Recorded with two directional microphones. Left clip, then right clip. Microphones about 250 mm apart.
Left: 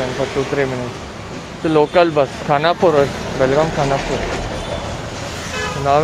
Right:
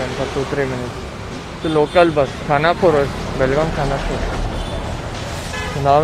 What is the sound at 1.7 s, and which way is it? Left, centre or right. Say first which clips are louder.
Speech: left 1 dB; centre.